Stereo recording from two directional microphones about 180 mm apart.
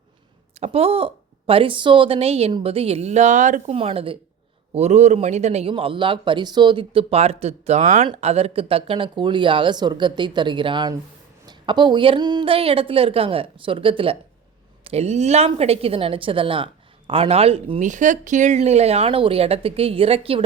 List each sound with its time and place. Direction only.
0.6 s a man's voice: 35° right (ahead or behind)
3.8 s a man's voice: 30° right (ahead or behind)